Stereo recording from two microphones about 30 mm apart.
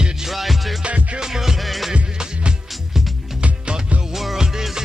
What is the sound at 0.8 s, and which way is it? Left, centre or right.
Music, right.